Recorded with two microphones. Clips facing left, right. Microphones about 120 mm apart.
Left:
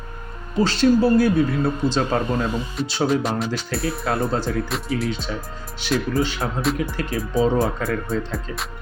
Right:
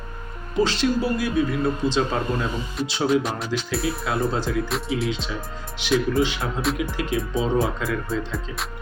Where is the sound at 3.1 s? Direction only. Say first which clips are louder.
Right 2 dB; centre (ahead or behind).